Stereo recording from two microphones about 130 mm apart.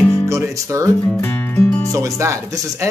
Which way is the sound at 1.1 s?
15° left (ahead or behind).